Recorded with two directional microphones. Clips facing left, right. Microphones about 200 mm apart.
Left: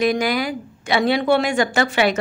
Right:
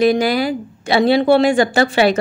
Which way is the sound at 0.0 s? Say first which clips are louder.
Right 5 dB; 30° right (ahead or behind).